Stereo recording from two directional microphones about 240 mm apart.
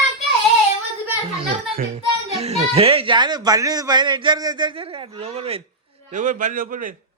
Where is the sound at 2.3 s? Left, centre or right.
Right.